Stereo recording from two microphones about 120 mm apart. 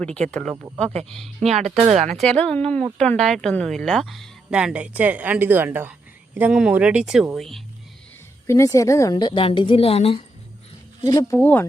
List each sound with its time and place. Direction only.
0.0 s speech: 10° left (ahead or behind)
1.9 s speech: 70° right (ahead or behind)
2.1 s speech: 10° left (ahead or behind)
8.4 s a woman's voice: 25° left (ahead or behind); by 10.2 s 55° left (ahead or behind)
11.0 s speech: 25° left (ahead or behind)